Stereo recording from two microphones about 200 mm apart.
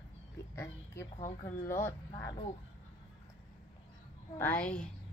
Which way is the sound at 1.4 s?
15° left (ahead or behind).